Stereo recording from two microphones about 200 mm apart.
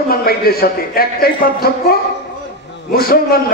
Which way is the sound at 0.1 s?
50° left (ahead or behind).